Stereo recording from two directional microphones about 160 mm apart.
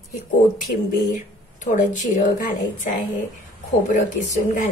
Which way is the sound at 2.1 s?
55° left (ahead or behind).